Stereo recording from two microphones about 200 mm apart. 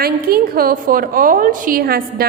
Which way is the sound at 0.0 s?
50° right (ahead or behind).